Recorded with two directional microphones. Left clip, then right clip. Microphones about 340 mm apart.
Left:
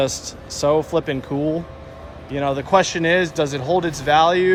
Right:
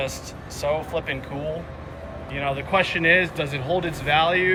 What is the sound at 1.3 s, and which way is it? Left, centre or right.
A man's voice, left.